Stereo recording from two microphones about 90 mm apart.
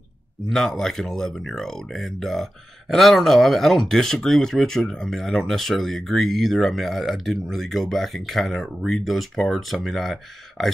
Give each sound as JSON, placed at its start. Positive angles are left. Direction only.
{"t": 0.5, "sound": "speech", "side_deg": 5}